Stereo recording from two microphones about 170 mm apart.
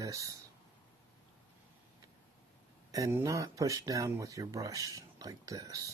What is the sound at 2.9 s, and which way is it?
Speech, 15° right (ahead or behind).